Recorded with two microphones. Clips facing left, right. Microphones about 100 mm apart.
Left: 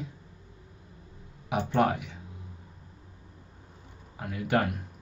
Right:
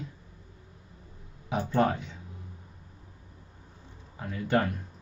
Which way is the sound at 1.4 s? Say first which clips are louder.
Left 1 dB; 80° left.